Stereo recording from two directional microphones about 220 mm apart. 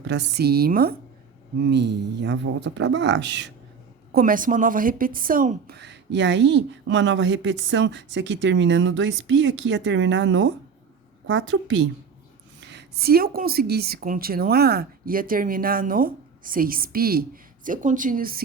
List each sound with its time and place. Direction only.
0.0 s speech: 50° right (ahead or behind)
4.1 s a woman's voice: 40° right (ahead or behind); by 11.9 s 60° right (ahead or behind)
12.6 s speech: 50° right (ahead or behind)